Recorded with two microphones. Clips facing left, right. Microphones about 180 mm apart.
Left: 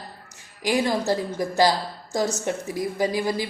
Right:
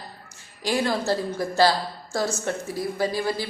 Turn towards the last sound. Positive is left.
turn(degrees=15)  # may be behind; listen again after turning